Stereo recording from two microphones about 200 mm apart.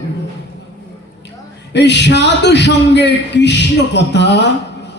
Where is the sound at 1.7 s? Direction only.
60° left (ahead or behind).